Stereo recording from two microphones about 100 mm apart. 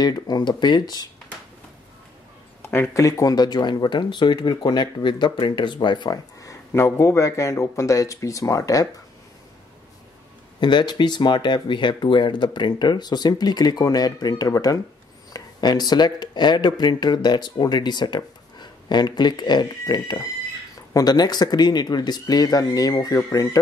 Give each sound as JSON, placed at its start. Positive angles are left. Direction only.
{"t": 0.0, "sound": "speech", "side_deg": 45}
{"t": 2.6, "sound": "speech", "side_deg": 25}
{"t": 3.0, "sound": "speech", "side_deg": 35}
{"t": 6.4, "sound": "speech", "side_deg": 30}
{"t": 10.6, "sound": "speech", "side_deg": 50}